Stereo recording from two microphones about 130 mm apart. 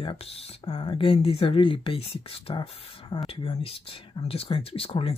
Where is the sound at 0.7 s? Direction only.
35° left (ahead or behind).